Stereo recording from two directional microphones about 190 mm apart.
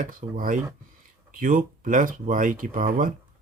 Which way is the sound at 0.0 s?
45° right (ahead or behind).